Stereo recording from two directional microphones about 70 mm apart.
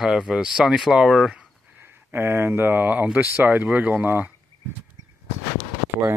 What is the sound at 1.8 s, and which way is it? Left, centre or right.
Speech, right.